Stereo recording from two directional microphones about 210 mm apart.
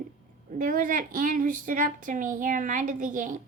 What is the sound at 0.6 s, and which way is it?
A child's voice, 40° right (ahead or behind).